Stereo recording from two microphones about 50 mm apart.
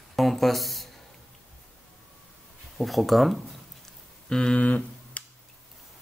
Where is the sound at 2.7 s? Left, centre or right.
Centre.